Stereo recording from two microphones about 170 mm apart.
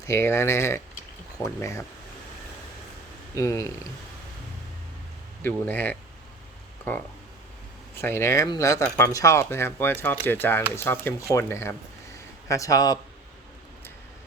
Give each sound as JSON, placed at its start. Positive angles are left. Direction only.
{"t": 0.0, "sound": "speech", "side_deg": 15}
{"t": 3.3, "sound": "speech", "side_deg": 20}
{"t": 5.4, "sound": "speech", "side_deg": 10}
{"t": 8.0, "sound": "a man's voice", "side_deg": 15}